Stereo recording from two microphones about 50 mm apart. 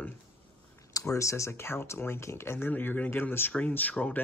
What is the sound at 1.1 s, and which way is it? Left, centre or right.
Speech, left.